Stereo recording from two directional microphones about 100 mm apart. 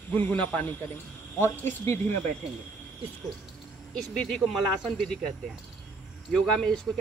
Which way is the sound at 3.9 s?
5° left (ahead or behind).